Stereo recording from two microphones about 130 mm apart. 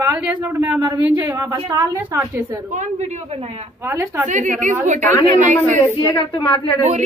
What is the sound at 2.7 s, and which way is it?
Speech, 70° right (ahead or behind).